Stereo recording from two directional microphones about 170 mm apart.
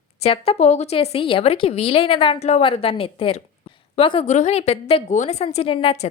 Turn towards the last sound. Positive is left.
turn(degrees=35)  # may be behind; listen again after turning